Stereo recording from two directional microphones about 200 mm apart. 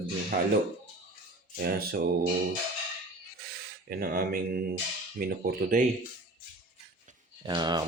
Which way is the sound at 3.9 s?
50° right (ahead or behind).